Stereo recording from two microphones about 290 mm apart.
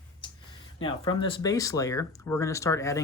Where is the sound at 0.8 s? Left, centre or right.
Centre.